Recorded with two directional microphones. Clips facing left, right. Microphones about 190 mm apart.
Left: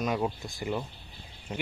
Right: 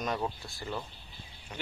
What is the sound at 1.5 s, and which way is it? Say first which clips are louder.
Speech: left 6 dB; 30° left (ahead or behind).